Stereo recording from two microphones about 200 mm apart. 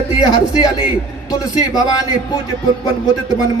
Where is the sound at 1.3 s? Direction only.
20° left (ahead or behind).